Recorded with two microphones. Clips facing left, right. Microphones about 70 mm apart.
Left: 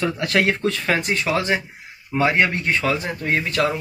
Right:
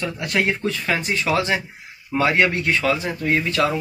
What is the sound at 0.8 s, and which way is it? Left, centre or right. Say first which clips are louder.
Speech: left 1 dB; left.